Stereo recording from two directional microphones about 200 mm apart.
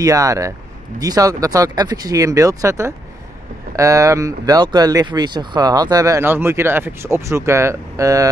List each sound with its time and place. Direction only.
0.0 s speech: 15° right (ahead or behind)